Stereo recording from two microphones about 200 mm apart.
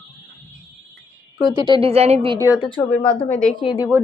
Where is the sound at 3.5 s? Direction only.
25° left (ahead or behind).